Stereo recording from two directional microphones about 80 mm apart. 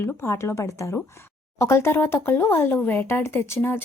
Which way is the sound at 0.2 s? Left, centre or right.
Left.